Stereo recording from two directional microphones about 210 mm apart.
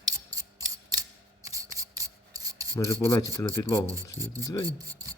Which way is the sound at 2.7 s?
15° left (ahead or behind).